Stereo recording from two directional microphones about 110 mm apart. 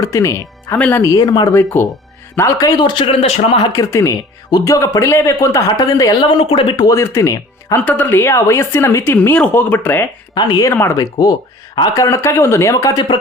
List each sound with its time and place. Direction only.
0.0 s speech: 30° left (ahead or behind)
0.8 s speech: 15° left (ahead or behind)
1.0 s speech: 35° left (ahead or behind)
1.5 s speech: 20° left (ahead or behind)
2.6 s speech: 40° left (ahead or behind)
3.1 s speech: 65° left (ahead or behind)
3.7 s speech: 30° left (ahead or behind)
6.4 s speech: 55° left (ahead or behind)
6.8 s speech: 25° left (ahead or behind)
7.9 s speech: 15° left (ahead or behind)
10.3 s speech: 40° left (ahead or behind)
10.7 s speech: 25° left (ahead or behind)
12.0 s speech: 25° left (ahead or behind)